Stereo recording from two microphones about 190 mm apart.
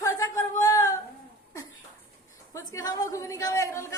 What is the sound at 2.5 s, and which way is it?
A woman's voice, 20° left (ahead or behind).